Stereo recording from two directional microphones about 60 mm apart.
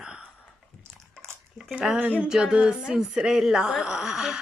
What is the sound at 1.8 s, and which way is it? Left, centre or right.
Speech, centre.